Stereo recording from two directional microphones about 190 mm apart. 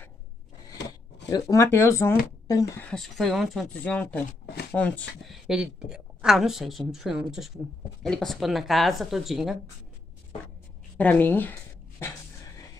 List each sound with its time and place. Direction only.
1.3 s speech: 15° left (ahead or behind)
2.9 s a woman's voice: centre (ahead or behind)
11.0 s speech: 10° left (ahead or behind)